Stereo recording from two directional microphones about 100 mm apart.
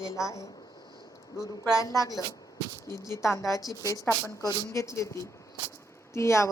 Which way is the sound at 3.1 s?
30° left (ahead or behind).